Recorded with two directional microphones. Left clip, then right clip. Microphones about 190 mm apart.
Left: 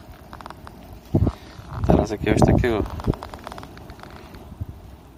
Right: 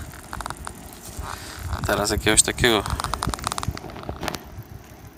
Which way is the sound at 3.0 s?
25° right (ahead or behind).